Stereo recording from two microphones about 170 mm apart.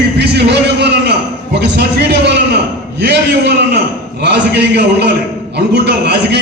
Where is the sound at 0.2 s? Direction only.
85° right.